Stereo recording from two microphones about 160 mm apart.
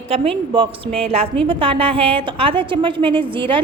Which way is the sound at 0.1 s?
35° right (ahead or behind).